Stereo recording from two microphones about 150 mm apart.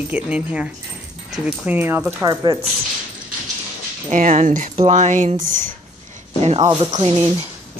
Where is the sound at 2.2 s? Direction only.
25° right (ahead or behind).